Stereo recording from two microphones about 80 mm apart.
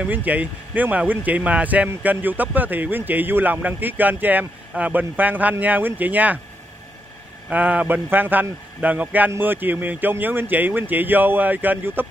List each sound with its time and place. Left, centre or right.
0.0 s a man's voice: centre
7.4 s a man's voice: centre